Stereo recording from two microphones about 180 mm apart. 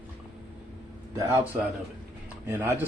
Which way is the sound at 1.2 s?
10° right (ahead or behind).